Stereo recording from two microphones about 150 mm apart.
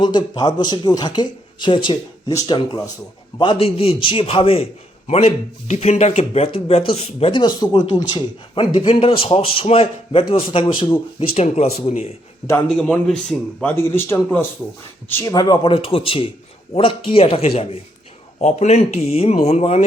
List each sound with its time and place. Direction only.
0.0 s a man's voice: 30° left (ahead or behind)
11.3 s speech: 50° left (ahead or behind)
12.6 s speech: 5° left (ahead or behind); by 19.8 s 45° left (ahead or behind)